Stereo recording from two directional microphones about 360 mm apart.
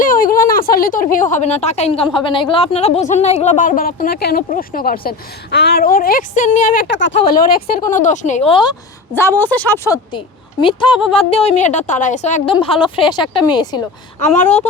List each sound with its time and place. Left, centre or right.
0.0 s speech: left
9.4 s speech: centre